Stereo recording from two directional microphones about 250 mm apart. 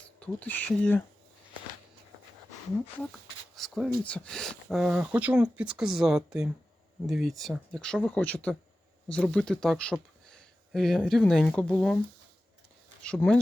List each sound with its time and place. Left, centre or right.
0.2 s speech: centre
3.0 s speech: centre
13.0 s speech: centre